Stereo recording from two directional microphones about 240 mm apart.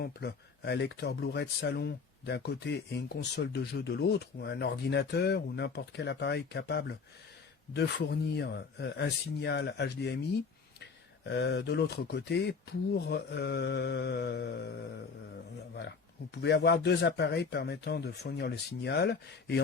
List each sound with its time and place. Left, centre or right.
0.0 s speech: left
16.3 s speech: left